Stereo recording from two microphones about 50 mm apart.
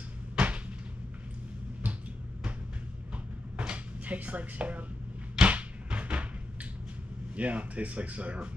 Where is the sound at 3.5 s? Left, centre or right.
Right.